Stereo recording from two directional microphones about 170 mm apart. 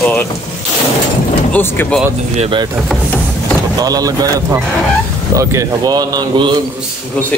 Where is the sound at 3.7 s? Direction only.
20° right (ahead or behind).